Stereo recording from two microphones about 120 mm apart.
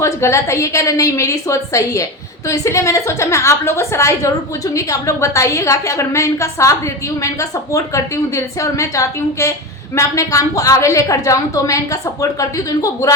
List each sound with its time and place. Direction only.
0.0 s a woman's voice: 25° left (ahead or behind)